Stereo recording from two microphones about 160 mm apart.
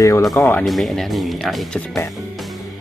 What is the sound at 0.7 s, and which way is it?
Speech, centre (ahead or behind).